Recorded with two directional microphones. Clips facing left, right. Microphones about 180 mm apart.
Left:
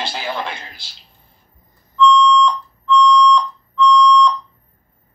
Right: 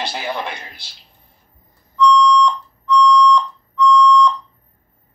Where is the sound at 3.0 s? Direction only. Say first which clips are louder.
Even; 10° right (ahead or behind).